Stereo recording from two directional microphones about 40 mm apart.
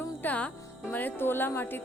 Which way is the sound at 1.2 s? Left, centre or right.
Left.